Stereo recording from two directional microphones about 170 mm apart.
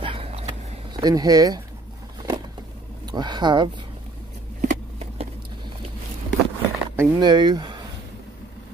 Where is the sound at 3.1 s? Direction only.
25° right (ahead or behind).